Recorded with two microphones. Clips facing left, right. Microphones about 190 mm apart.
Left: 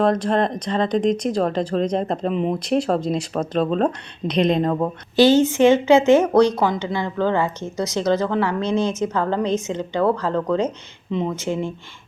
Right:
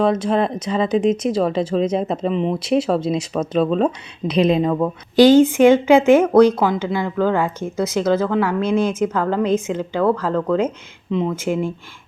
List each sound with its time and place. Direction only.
0.0 s a woman's voice: 5° right (ahead or behind)